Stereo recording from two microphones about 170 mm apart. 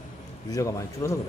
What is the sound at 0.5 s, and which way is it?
Speech, 20° left (ahead or behind).